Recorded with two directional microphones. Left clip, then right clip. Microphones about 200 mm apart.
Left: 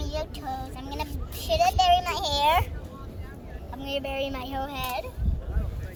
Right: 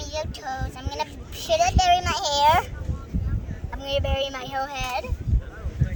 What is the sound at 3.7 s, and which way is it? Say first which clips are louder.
A child's voice: right 5 dB; 30° right (ahead or behind).